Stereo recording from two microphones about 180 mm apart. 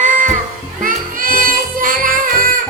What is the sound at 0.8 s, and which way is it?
Music, 50° right (ahead or behind).